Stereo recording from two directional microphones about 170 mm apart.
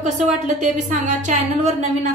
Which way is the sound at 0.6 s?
45° right (ahead or behind).